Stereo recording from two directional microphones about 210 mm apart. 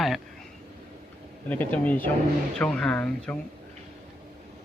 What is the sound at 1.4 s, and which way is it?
Speech, 10° left (ahead or behind).